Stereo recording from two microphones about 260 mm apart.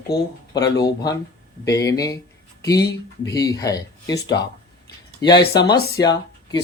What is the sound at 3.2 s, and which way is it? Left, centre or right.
Speech, centre.